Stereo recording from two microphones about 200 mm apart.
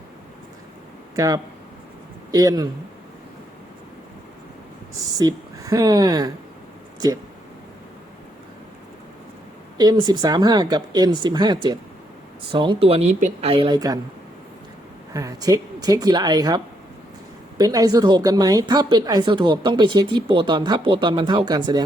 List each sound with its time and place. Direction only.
1.1 s speech: 15° right (ahead or behind)
5.1 s speech: 15° right (ahead or behind)
9.7 s speech: 20° right (ahead or behind)
15.1 s speech: 15° right (ahead or behind)
17.6 s speech: 20° right (ahead or behind)